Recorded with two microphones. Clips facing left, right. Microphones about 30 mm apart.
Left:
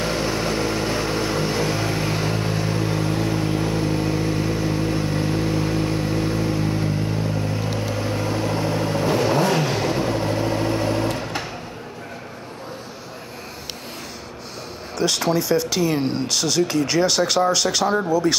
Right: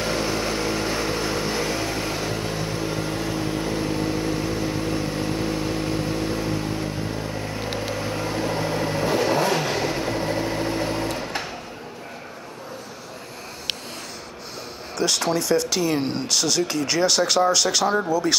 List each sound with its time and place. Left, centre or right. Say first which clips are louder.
0.0 s vehicle: left 1 dB; centre
3.1 s vehicle: left 4 dB; left
3.5 s vehicle: left 2 dB; centre
9.8 s vehicle: left 3 dB; centre
10.1 s vehicle: left 2 dB; centre
15.0 s speech: left 2 dB; centre